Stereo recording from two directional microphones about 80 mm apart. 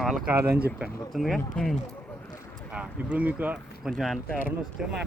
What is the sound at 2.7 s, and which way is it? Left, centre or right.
Speech, centre.